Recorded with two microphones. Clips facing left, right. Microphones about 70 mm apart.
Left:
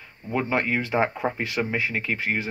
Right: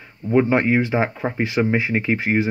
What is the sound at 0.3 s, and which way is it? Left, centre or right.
Speech, centre.